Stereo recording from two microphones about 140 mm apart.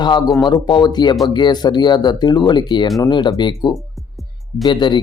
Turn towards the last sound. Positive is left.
turn(degrees=35)  # may be behind; listen again after turning